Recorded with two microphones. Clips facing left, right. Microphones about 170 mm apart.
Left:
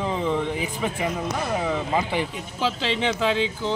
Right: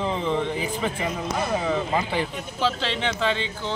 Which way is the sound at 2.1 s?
15° left (ahead or behind).